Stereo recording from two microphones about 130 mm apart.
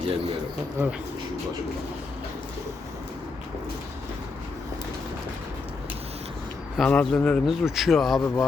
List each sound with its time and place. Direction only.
0.8 s speech: 15° right (ahead or behind)
6.7 s speech: 5° left (ahead or behind)
7.4 s speech: centre (ahead or behind)